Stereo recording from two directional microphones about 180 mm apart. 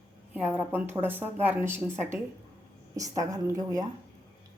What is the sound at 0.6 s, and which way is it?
A woman's voice, 10° right (ahead or behind).